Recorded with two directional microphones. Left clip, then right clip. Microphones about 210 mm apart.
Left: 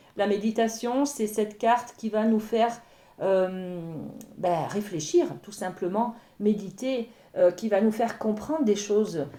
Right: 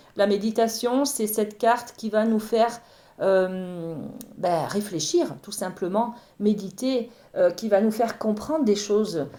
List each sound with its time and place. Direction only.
0.2 s speech: 35° right (ahead or behind)